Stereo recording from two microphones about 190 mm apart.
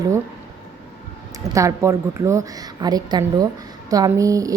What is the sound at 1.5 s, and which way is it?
A woman's voice, 15° right (ahead or behind).